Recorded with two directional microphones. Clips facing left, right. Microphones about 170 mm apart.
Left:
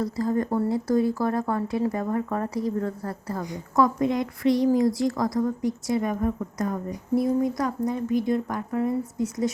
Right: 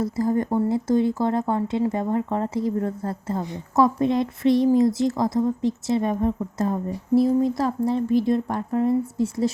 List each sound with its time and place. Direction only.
0.0 s speech: 25° right (ahead or behind)